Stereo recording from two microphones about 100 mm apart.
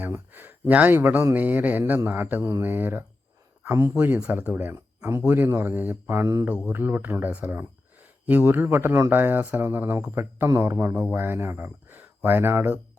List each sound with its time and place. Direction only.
0.1 s speech: 25° right (ahead or behind)